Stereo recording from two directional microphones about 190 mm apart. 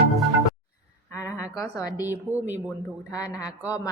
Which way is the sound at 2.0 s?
10° right (ahead or behind).